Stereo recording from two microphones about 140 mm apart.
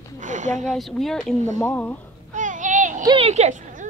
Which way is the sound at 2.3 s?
65° right (ahead or behind).